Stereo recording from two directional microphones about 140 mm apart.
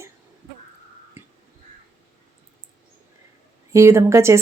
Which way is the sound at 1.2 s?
15° right (ahead or behind).